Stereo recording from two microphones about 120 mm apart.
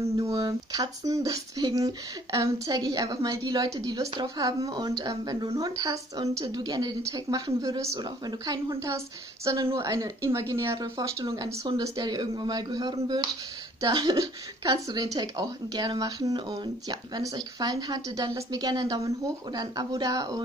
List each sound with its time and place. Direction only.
0.2 s a woman's voice: 25° right (ahead or behind)